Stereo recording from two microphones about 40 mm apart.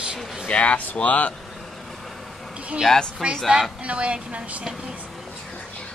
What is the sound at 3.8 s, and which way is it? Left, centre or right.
Speech, right.